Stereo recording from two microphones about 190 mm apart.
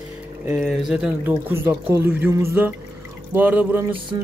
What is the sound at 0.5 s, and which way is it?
Speech, centre (ahead or behind).